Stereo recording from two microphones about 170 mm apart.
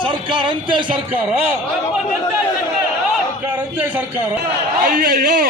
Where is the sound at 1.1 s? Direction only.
10° right (ahead or behind).